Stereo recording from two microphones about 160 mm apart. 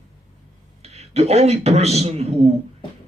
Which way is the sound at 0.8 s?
40° right (ahead or behind).